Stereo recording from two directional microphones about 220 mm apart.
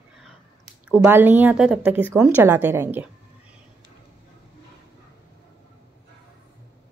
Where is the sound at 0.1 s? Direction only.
Centre (ahead or behind).